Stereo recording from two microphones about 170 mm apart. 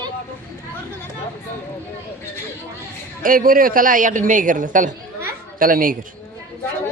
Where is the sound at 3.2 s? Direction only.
55° right (ahead or behind).